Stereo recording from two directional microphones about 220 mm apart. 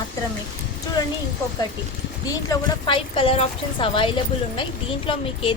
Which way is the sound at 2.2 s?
15° left (ahead or behind).